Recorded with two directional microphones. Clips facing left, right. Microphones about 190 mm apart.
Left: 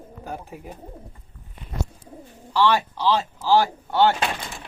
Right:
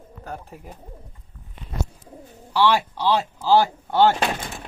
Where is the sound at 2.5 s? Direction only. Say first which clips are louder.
Right 1 dB; 10° right (ahead or behind).